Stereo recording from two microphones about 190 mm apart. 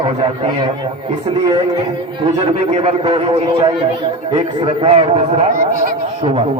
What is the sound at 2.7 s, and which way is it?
A man's voice, 35° right (ahead or behind).